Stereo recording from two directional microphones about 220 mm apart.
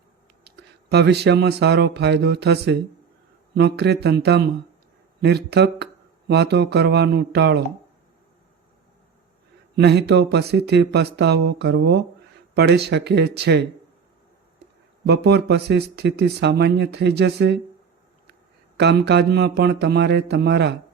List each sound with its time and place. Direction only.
0.4 s speech: 50° right (ahead or behind)
9.7 s speech: 50° right (ahead or behind)
15.0 s speech: 50° right (ahead or behind)
18.8 s speech: 50° right (ahead or behind)